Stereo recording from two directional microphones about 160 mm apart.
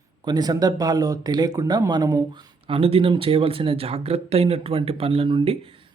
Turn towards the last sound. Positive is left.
turn(degrees=-35)  # may be behind; listen again after turning